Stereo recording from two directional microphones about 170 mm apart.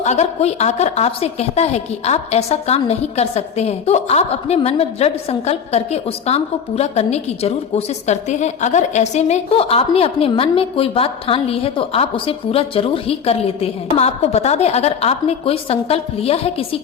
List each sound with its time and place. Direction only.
0.0 s a woman's voice: 40° left (ahead or behind)